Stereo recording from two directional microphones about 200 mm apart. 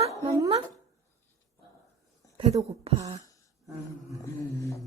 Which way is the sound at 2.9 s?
30° right (ahead or behind).